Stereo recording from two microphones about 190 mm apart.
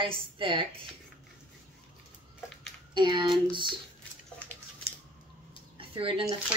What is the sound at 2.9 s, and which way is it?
Speech, 25° right (ahead or behind).